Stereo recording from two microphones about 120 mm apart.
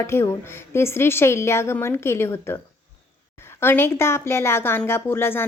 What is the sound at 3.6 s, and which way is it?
A woman's voice, 20° left (ahead or behind).